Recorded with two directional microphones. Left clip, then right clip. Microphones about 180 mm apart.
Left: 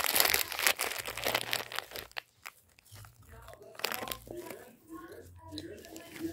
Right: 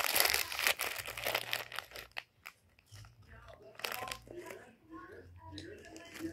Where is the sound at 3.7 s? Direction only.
90° left.